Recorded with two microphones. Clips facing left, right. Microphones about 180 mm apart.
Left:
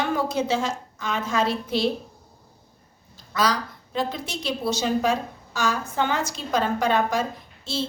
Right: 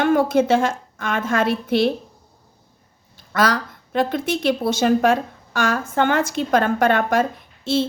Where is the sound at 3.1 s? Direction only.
55° right (ahead or behind).